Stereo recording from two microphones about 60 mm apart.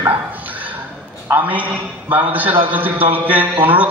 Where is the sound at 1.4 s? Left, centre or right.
Right.